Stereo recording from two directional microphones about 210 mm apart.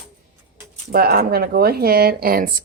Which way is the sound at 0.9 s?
45° right (ahead or behind).